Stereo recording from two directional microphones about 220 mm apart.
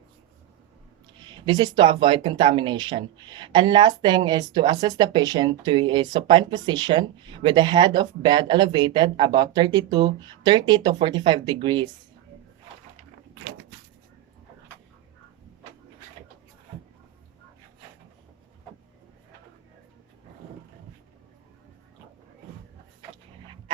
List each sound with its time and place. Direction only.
1.2 s speech: 20° right (ahead or behind)